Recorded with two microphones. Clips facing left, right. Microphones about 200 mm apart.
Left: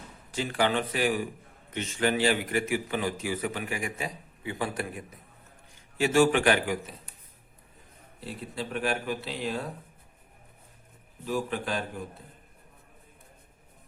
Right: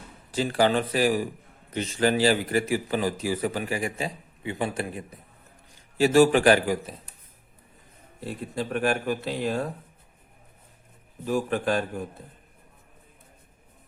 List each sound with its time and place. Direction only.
0.3 s a man's voice: 35° right (ahead or behind)
6.0 s a man's voice: 35° right (ahead or behind)
8.2 s speech: 50° right (ahead or behind)
11.3 s speech: 50° right (ahead or behind)